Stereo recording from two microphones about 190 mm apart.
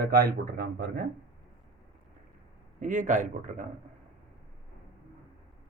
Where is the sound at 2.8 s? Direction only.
40° right (ahead or behind).